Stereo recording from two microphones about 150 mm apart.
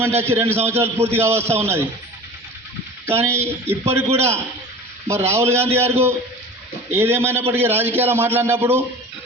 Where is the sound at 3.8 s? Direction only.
40° right (ahead or behind).